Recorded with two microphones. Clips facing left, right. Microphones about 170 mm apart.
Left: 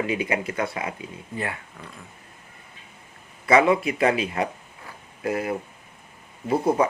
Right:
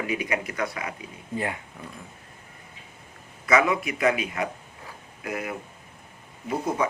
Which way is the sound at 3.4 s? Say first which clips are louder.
Left 4 dB; 30° left (ahead or behind).